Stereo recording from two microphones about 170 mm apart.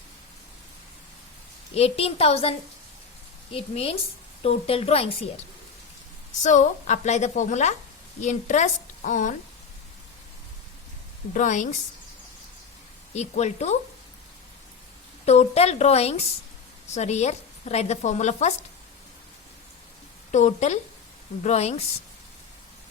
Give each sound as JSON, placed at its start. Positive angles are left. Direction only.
{"t": 1.7, "sound": "a woman's voice", "side_deg": 35}
{"t": 6.4, "sound": "a woman's voice", "side_deg": 45}
{"t": 11.3, "sound": "a woman's voice", "side_deg": 45}
{"t": 13.1, "sound": "a woman's voice", "side_deg": 40}
{"t": 15.3, "sound": "a woman's voice", "side_deg": 40}
{"t": 20.3, "sound": "a woman's voice", "side_deg": 40}